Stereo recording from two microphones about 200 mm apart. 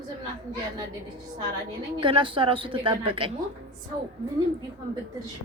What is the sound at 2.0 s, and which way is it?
Speech, 25° right (ahead or behind).